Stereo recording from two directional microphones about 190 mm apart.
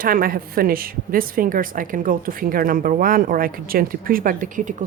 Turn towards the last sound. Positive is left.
turn(degrees=-40)  # may be behind; listen again after turning